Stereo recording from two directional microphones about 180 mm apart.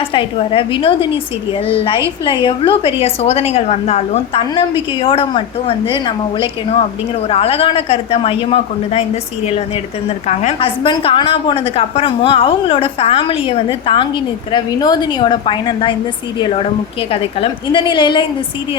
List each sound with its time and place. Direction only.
0.0 s a woman's voice: 30° left (ahead or behind)